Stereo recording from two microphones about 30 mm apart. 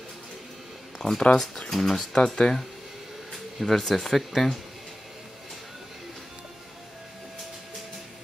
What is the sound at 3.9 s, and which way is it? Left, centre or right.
Speech, centre.